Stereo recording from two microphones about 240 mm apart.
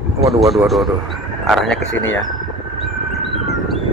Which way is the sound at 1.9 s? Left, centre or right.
Left.